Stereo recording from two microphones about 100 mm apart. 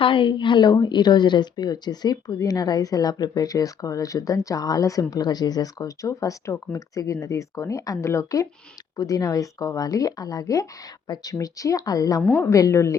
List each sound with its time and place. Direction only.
0.0 s a woman's voice: 60° left (ahead or behind); by 13.0 s 30° left (ahead or behind)